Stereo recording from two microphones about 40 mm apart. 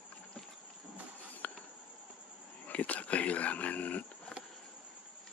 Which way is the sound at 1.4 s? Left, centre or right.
Left.